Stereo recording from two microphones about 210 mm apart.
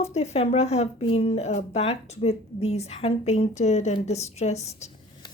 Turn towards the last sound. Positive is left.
turn(degrees=30)  # may be behind; listen again after turning